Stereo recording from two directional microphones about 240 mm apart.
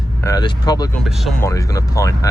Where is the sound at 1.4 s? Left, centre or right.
Centre.